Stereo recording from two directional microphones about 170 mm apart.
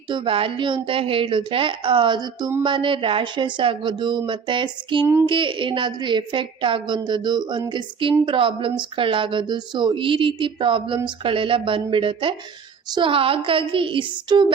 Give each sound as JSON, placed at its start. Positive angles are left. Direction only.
{"t": 0.1, "sound": "a woman's voice", "side_deg": -30}